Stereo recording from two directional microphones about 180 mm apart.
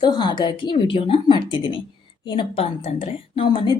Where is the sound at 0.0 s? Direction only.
25° left (ahead or behind).